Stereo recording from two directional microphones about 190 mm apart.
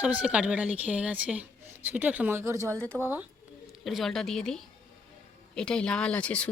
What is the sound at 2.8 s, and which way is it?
A woman's voice, 5° left (ahead or behind).